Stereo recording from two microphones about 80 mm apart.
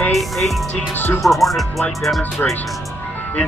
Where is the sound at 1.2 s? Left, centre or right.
Centre.